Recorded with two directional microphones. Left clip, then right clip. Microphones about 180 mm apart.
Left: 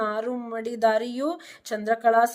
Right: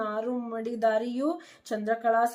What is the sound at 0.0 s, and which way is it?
A woman's voice, 40° left (ahead or behind).